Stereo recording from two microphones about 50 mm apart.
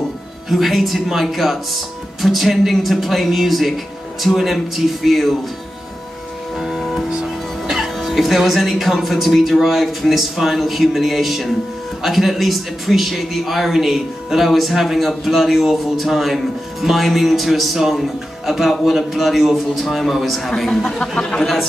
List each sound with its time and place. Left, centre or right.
0.5 s speech: centre
6.6 s music: centre
7.1 s music: centre
8.5 s speech: centre
20.7 s speech: centre